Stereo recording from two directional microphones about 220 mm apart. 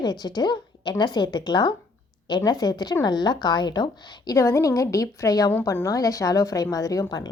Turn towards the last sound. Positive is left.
turn(degrees=15)  # may be behind; listen again after turning